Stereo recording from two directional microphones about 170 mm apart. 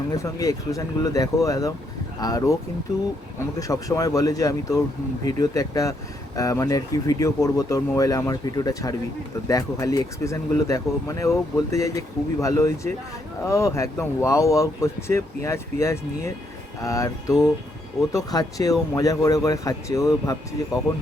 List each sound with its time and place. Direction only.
0.1 s speech: 20° left (ahead or behind)
3.6 s speech: 20° left (ahead or behind)